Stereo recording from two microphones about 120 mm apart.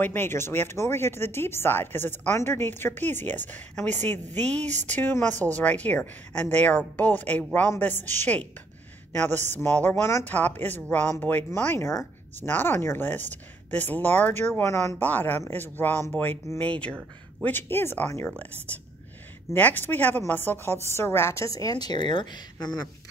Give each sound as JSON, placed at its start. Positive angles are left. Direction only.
{"t": 0.0, "sound": "a woman's voice", "side_deg": 20}
{"t": 15.0, "sound": "speech", "side_deg": 15}
{"t": 19.5, "sound": "a woman's voice", "side_deg": 15}